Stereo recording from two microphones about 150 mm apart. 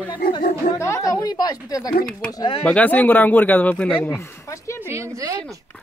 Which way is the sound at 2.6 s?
10° left (ahead or behind).